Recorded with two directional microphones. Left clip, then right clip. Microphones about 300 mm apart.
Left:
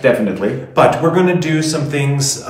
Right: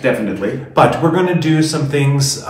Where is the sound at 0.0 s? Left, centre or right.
Centre.